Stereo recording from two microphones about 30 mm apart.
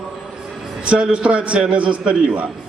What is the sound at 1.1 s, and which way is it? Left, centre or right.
A man's voice, right.